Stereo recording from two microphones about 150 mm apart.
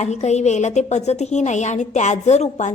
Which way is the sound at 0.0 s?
50° left (ahead or behind).